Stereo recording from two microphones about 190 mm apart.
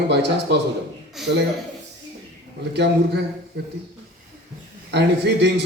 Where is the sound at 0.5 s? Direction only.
65° right (ahead or behind).